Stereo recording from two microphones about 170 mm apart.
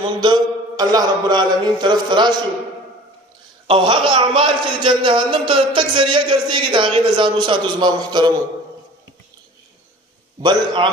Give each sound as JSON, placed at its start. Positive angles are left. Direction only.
{"t": 0.2, "sound": "a man's voice", "side_deg": -25}
{"t": 3.6, "sound": "a man's voice", "side_deg": -30}
{"t": 10.4, "sound": "a man's voice", "side_deg": -30}